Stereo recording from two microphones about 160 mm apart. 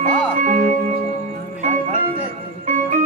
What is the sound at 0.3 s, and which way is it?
Music, 55° right (ahead or behind).